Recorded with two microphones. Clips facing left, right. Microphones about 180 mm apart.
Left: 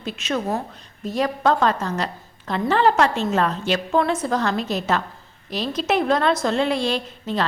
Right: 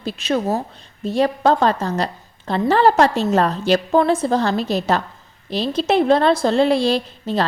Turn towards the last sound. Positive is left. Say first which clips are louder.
# right 3 dB
turn(degrees=-35)  # may be behind; listen again after turning